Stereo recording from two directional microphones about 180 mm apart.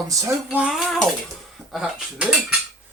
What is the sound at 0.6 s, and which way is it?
Cutlery, centre (ahead or behind).